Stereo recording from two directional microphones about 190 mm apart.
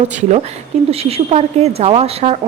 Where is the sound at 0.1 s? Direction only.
40° right (ahead or behind).